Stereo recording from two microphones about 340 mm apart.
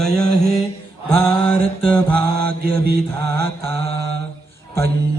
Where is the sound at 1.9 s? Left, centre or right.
Centre.